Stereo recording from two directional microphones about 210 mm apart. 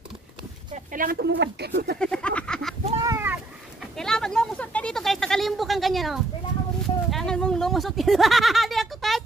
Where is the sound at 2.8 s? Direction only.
30° right (ahead or behind).